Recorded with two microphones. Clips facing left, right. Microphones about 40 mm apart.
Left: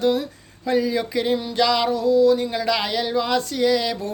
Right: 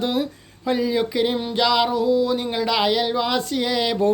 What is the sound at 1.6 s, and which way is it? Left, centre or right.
Speech, centre.